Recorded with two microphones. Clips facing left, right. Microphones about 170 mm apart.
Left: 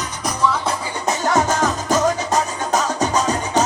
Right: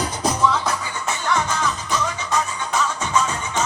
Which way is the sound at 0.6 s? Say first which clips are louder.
Left 2 dB; 25° left (ahead or behind).